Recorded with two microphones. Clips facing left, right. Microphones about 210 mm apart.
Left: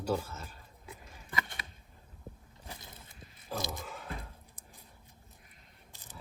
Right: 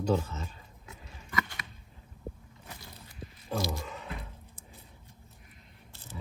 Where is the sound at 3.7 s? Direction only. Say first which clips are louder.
Right 4 dB; centre (ahead or behind).